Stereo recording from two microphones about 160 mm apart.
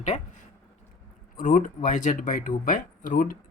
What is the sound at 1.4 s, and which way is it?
Speech, 55° left (ahead or behind).